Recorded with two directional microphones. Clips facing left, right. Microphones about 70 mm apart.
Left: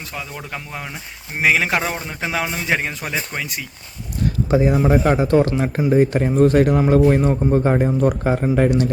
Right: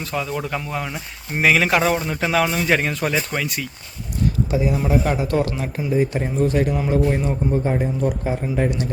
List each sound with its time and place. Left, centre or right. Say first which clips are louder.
0.1 s speech: right 7 dB; centre
4.5 s speech: left 6 dB; left
5.9 s a man's voice: left 4 dB; left
8.0 s a man's voice: left 5 dB; left